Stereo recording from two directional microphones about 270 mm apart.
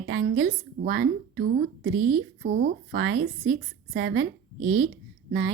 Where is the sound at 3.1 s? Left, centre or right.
Right.